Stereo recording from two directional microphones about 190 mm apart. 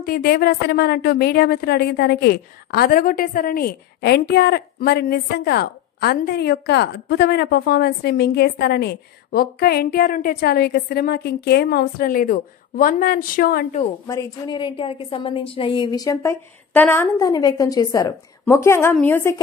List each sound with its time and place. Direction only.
0.0 s a woman's voice: 50° left (ahead or behind)
14.0 s a woman's voice: 15° left (ahead or behind)